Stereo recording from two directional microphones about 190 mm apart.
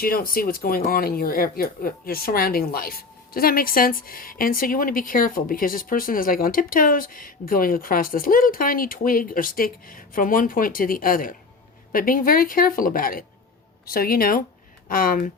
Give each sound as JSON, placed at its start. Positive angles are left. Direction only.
{"t": 0.0, "sound": "speech", "side_deg": 50}